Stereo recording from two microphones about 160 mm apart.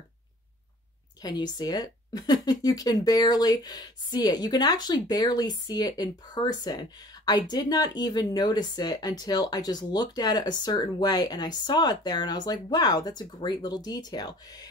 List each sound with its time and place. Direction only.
1.2 s speech: 25° left (ahead or behind)